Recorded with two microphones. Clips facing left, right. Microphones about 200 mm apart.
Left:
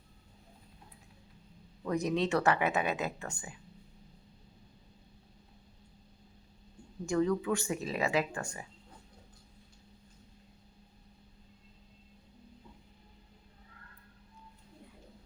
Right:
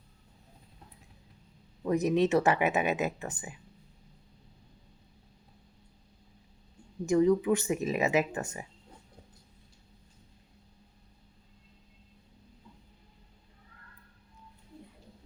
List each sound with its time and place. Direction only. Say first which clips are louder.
1.8 s speech: right 5 dB; 20° right (ahead or behind)
7.0 s speech: right 6 dB; 20° right (ahead or behind)